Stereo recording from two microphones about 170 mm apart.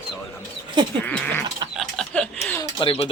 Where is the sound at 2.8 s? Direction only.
30° left (ahead or behind).